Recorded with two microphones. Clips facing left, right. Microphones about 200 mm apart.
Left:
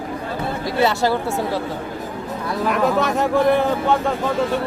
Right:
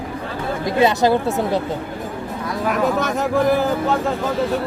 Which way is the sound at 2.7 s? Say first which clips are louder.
Left 1 dB; centre (ahead or behind).